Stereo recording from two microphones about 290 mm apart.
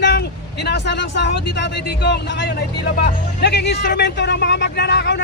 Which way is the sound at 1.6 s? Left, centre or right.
Left.